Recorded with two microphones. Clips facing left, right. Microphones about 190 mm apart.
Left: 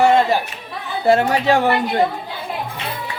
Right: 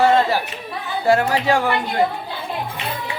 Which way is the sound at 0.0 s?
15° left (ahead or behind).